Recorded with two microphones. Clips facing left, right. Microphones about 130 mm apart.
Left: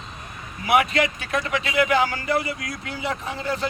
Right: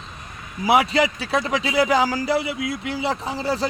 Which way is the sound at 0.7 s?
30° right (ahead or behind).